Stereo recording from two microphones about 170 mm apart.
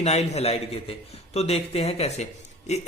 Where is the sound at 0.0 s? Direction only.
40° left (ahead or behind).